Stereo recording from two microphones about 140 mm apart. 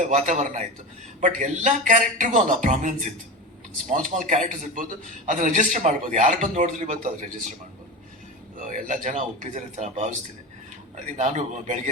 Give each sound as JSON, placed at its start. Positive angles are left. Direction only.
{"t": 0.0, "sound": "a man's voice", "side_deg": -60}
{"t": 8.6, "sound": "a man's voice", "side_deg": -65}